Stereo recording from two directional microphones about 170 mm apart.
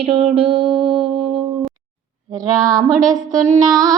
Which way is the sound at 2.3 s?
20° right (ahead or behind).